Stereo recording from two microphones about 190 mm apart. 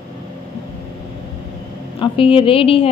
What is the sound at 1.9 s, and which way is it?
Speech, 30° left (ahead or behind).